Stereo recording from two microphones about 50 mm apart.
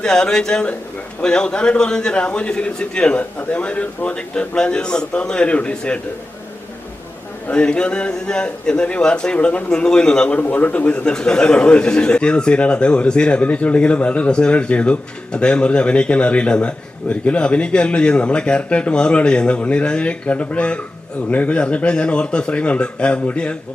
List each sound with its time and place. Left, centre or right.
0.0 s a man's voice: centre
7.4 s a man's voice: left
9.6 s a man's voice: centre
10.4 s a man's voice: left
11.1 s a man's voice: centre